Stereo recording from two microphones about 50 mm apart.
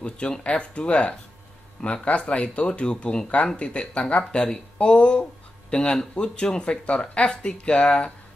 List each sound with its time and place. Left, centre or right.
0.0 s speech: centre